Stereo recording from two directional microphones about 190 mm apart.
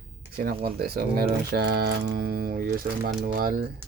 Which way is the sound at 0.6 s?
55° right (ahead or behind).